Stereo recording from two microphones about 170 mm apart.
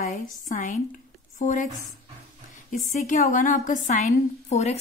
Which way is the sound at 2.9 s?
50° left (ahead or behind).